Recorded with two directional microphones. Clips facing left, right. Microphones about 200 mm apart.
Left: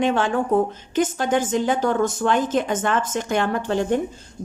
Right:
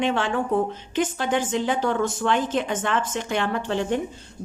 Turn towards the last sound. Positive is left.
turn(degrees=45)  # may be behind; listen again after turning